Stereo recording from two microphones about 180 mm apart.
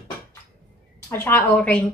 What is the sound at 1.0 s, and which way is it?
Speech, 15° left (ahead or behind).